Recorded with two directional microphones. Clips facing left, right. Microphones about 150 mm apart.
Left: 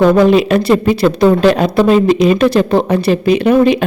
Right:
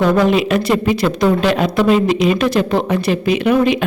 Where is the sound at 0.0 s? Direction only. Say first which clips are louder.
Left 5 dB; 35° left (ahead or behind).